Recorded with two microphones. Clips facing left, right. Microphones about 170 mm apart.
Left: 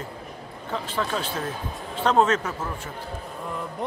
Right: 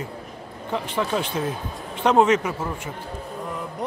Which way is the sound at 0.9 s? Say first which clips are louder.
Right 3 dB; 15° right (ahead or behind).